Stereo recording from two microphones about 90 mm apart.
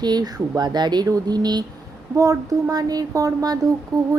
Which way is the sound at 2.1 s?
40° right (ahead or behind).